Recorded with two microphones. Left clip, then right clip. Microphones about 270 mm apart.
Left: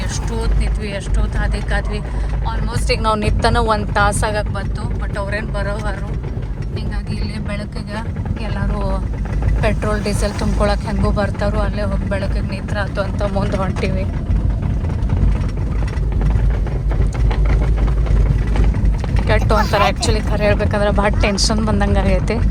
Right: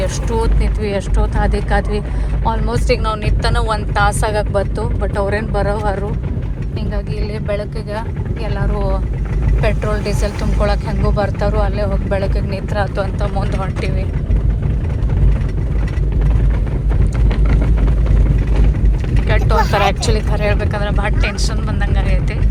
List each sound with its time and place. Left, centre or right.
0.3 s vehicle: centre
2.4 s speech: centre
4.5 s speech: centre
5.2 s speech: centre
7.4 s speech: centre
9.6 s speech: centre
19.3 s speech: centre